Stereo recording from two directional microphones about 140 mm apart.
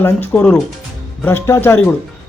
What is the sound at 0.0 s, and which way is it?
A man's voice, 15° left (ahead or behind).